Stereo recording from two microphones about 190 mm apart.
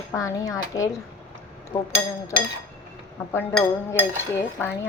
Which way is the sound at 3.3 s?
5° left (ahead or behind).